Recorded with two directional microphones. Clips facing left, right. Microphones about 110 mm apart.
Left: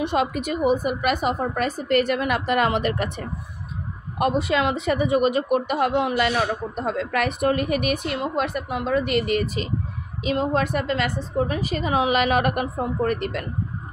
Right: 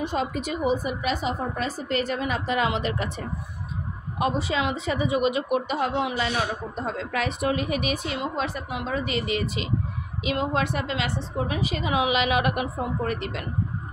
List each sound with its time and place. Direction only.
0.0 s speech: 70° left (ahead or behind); by 9.7 s 50° left (ahead or behind)
10.2 s a woman's voice: 40° left (ahead or behind)